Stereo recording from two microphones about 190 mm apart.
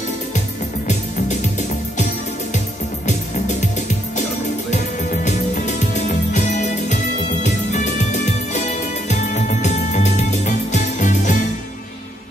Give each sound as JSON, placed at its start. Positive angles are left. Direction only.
{"t": 5.2, "sound": "music", "side_deg": 40}